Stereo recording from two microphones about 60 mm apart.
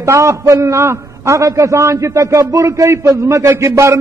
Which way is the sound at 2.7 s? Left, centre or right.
Right.